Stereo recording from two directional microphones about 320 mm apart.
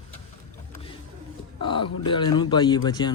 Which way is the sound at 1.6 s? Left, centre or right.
Centre.